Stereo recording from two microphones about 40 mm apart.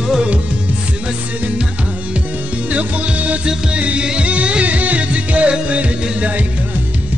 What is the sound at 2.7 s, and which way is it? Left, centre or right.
Music, right.